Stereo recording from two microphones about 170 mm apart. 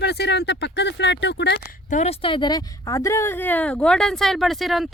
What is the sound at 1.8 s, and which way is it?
Speech, 45° left (ahead or behind).